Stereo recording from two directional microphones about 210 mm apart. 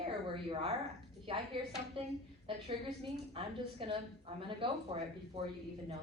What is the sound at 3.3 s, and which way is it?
A woman's voice, 25° right (ahead or behind).